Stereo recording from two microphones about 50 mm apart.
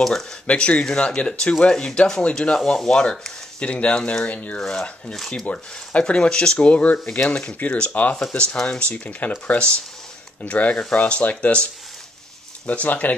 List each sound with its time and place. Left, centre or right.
0.0 s speech: centre
0.5 s speech: left
4.6 s speech: centre; by 13.1 s left